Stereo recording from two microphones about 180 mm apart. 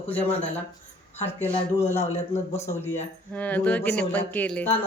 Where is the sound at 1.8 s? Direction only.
40° left (ahead or behind).